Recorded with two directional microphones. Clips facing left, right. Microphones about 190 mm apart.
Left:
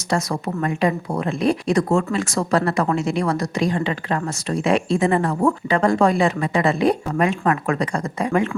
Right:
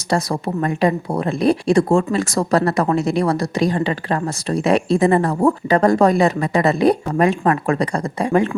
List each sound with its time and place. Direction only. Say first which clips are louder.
0.1 s speech: right 3 dB; 35° right (ahead or behind)